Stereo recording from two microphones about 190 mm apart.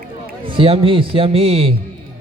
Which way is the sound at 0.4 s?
25° right (ahead or behind).